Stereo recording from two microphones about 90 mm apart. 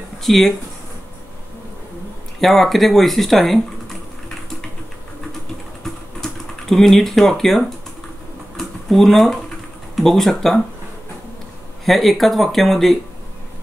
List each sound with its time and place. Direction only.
0.2 s speech: centre (ahead or behind)
2.4 s speech: 5° left (ahead or behind)
6.2 s speech: 5° left (ahead or behind)
8.5 s a sound: centre (ahead or behind)
9.9 s speech: 5° left (ahead or behind)
11.8 s speech: centre (ahead or behind)